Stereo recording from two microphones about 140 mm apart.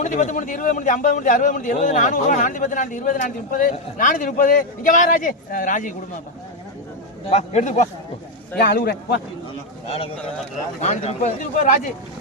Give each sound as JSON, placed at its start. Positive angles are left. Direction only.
{"t": 0.0, "sound": "a man's voice", "side_deg": 65}
{"t": 7.3, "sound": "a man's voice", "side_deg": 55}
{"t": 8.6, "sound": "speech", "side_deg": 90}
{"t": 9.9, "sound": "speech", "side_deg": 45}
{"t": 10.8, "sound": "a man's voice", "side_deg": 55}